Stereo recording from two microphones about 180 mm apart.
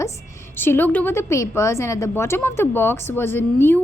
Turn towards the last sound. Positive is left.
turn(degrees=10)  # may be behind; listen again after turning